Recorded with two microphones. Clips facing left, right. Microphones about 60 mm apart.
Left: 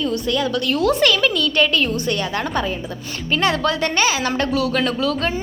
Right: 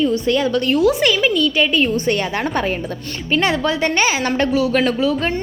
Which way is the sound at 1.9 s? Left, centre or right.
Right.